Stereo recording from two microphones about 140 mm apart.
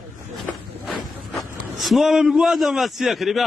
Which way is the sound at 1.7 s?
Centre (ahead or behind).